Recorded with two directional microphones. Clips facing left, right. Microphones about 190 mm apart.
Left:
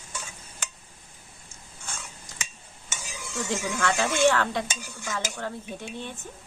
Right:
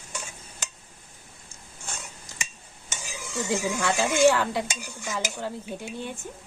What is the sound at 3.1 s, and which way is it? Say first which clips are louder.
Stir: right 3 dB; 5° right (ahead or behind).